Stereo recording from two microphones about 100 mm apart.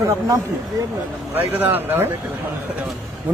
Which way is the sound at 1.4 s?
20° right (ahead or behind).